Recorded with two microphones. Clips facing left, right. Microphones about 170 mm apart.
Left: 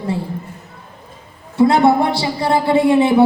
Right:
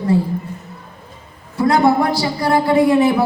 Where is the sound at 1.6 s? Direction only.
25° left (ahead or behind).